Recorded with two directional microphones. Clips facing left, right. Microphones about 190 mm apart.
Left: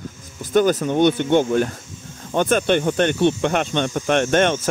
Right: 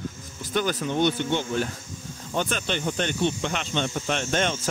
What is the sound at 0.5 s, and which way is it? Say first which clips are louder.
Speech: left 8 dB; 50° left (ahead or behind).